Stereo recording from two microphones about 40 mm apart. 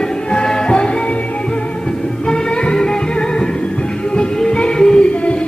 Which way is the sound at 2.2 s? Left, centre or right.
Left.